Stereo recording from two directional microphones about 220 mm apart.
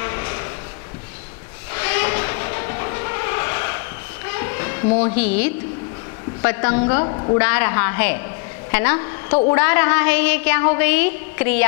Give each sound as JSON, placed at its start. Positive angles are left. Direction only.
{"t": 0.0, "sound": "a sound", "side_deg": 20}
{"t": 1.7, "sound": "vehicle", "side_deg": 15}
{"t": 4.3, "sound": "a sound", "side_deg": 15}
{"t": 5.1, "sound": "a woman's voice", "side_deg": 10}
{"t": 6.6, "sound": "a woman's voice", "side_deg": 25}
{"t": 7.3, "sound": "a woman's voice", "side_deg": 10}
{"t": 9.3, "sound": "a woman's voice", "side_deg": 25}
{"t": 9.6, "sound": "a woman's voice", "side_deg": 15}